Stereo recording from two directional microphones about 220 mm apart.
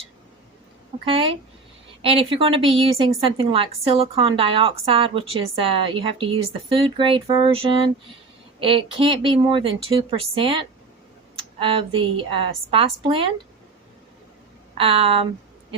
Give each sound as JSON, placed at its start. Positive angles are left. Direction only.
{"t": 1.0, "sound": "a woman's voice", "side_deg": -25}
{"t": 14.8, "sound": "a woman's voice", "side_deg": -25}